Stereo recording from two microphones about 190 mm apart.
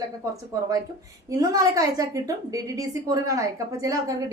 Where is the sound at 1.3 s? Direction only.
20° right (ahead or behind).